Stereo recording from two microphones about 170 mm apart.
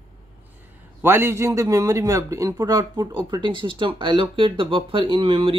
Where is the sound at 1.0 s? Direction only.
15° right (ahead or behind).